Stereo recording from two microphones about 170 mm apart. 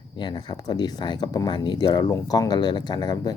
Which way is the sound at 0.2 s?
25° left (ahead or behind).